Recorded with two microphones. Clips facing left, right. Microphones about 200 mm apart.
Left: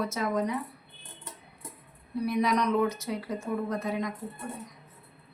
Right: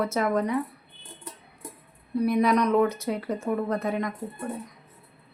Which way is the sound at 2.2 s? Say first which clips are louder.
Right 4 dB; 55° right (ahead or behind).